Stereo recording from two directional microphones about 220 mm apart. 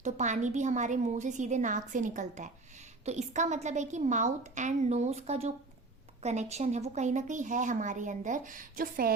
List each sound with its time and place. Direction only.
0.0 s a woman's voice: 35° right (ahead or behind)